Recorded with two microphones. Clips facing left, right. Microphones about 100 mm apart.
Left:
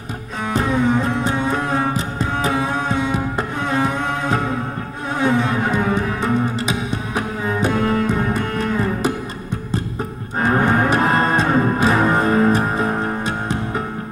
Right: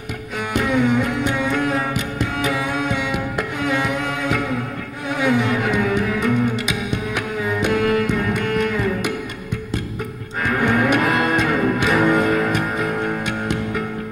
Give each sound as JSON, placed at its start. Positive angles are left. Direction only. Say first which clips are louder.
{"t": 0.5, "sound": "music", "louder": "even", "side_deg": 30}
{"t": 10.4, "sound": "music", "louder": "left 2 dB", "side_deg": 30}